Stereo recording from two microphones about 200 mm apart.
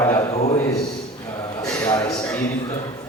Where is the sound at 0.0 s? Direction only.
15° left (ahead or behind).